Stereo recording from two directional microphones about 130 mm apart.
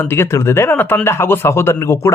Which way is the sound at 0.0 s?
20° left (ahead or behind).